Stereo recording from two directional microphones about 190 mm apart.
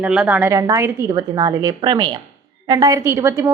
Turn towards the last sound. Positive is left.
turn(degrees=-15)  # may be behind; listen again after turning